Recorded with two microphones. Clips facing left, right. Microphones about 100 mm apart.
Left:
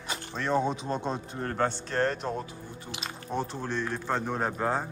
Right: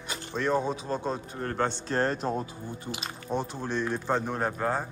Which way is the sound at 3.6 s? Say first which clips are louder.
Right 2 dB; 10° right (ahead or behind).